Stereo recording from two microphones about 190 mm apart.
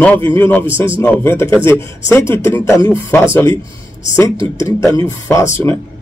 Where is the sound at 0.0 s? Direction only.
10° left (ahead or behind).